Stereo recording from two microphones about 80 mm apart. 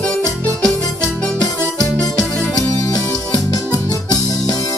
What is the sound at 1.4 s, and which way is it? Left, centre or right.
Music, left.